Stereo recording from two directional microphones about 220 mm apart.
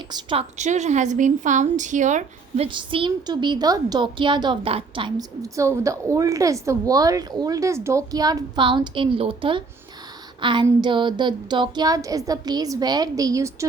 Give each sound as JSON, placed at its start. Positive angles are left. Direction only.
{"t": 0.1, "sound": "a woman's voice", "side_deg": -20}
{"t": 2.6, "sound": "a woman's voice", "side_deg": -20}